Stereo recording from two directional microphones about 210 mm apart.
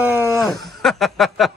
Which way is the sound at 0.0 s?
10° right (ahead or behind).